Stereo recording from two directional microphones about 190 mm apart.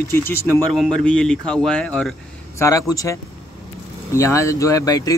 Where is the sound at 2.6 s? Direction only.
15° left (ahead or behind).